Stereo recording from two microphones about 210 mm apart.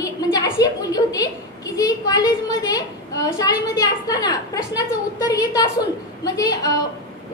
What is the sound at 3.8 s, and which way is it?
A woman's voice, 20° left (ahead or behind).